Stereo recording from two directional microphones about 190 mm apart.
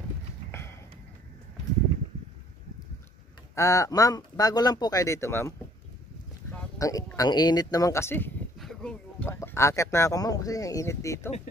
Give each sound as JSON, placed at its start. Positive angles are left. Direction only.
{"t": 0.5, "sound": "a sound", "side_deg": 10}
{"t": 3.5, "sound": "speech", "side_deg": 15}
{"t": 6.8, "sound": "speech", "side_deg": 20}